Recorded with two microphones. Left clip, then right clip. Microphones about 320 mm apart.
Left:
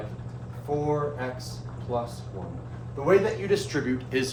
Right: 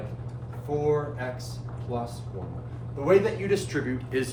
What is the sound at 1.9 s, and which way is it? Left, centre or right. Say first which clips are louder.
Speech: left 3 dB; centre.